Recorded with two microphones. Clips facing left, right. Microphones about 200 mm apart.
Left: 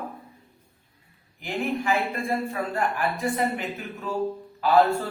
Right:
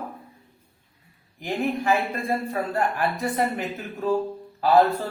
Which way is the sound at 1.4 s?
40° right (ahead or behind).